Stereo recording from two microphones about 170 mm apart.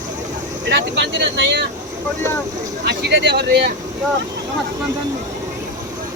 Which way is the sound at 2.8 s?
85° right.